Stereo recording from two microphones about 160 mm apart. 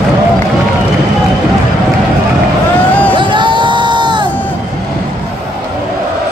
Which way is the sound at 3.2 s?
30° right (ahead or behind).